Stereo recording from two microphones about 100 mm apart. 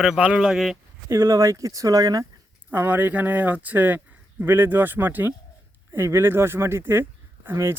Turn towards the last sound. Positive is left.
turn(degrees=-25)  # may be behind; listen again after turning